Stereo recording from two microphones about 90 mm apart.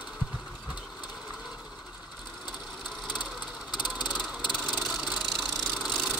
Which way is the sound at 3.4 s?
55° left (ahead or behind).